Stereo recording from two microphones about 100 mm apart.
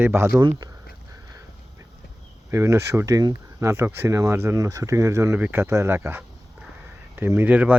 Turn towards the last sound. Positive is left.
turn(degrees=-15)  # may be behind; listen again after turning